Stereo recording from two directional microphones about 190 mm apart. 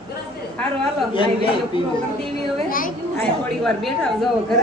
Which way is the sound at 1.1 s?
25° left (ahead or behind).